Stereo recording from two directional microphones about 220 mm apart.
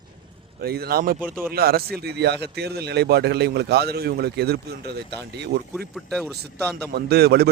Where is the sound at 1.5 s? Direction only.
45° right (ahead or behind).